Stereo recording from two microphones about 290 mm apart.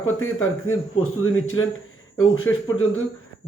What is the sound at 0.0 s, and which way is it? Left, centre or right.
Speech, left.